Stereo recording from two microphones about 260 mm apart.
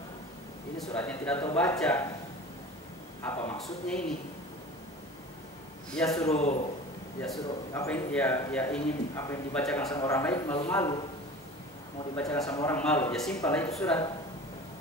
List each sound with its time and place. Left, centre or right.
0.7 s a man's voice: centre
3.4 s a man's voice: centre
5.9 s a man's voice: centre
6.2 s a man's voice: left
7.2 s a man's voice: centre
12.5 s a man's voice: centre